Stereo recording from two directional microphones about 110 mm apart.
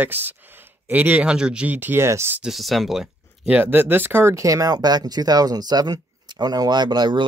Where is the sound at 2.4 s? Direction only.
Centre (ahead or behind).